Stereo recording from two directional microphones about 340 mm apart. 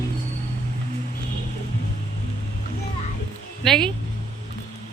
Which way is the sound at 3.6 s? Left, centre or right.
Centre.